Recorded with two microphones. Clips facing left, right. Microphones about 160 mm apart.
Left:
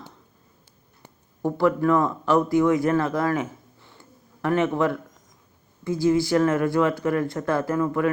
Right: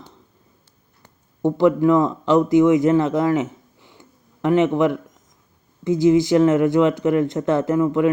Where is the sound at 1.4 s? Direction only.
20° right (ahead or behind).